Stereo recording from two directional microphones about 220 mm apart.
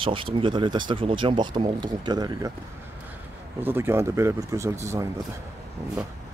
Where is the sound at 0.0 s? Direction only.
25° right (ahead or behind).